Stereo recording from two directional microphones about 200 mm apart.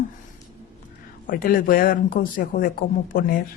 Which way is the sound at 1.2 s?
45° left (ahead or behind).